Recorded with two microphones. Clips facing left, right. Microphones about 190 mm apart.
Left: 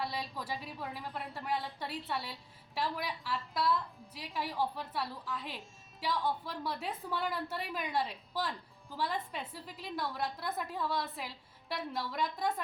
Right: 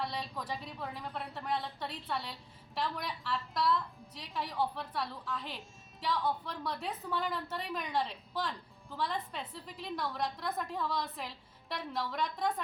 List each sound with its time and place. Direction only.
0.0 s a woman's voice: 5° left (ahead or behind)